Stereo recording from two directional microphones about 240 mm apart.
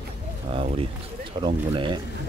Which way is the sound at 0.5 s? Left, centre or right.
Right.